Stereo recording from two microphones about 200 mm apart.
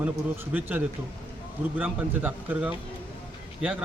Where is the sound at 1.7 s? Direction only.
10° right (ahead or behind).